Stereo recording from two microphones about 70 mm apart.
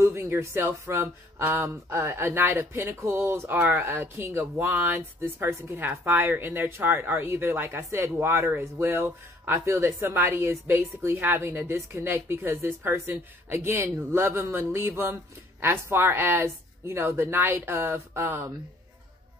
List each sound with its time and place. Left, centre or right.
0.0 s speech: right